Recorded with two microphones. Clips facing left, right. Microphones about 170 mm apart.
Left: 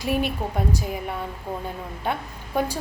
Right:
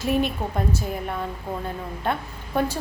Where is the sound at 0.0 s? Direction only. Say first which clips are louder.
Right 1 dB; 10° left (ahead or behind).